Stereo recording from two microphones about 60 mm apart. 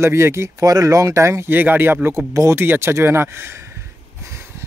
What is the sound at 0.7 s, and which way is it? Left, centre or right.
Speech, right.